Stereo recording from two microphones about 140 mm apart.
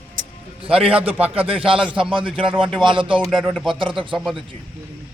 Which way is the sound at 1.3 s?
40° right (ahead or behind).